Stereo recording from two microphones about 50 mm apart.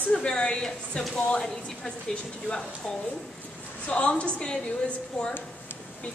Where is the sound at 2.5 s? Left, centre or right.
Left.